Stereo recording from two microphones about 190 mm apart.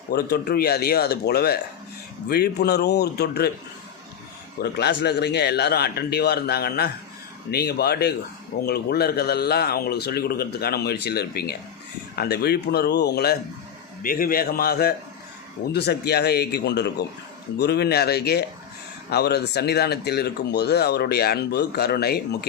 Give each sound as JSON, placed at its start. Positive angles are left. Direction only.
{"t": 0.1, "sound": "speech", "side_deg": 60}
{"t": 4.6, "sound": "a man's voice", "side_deg": 60}